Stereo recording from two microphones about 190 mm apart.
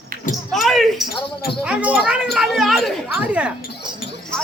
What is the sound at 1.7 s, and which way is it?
Speech, 5° right (ahead or behind).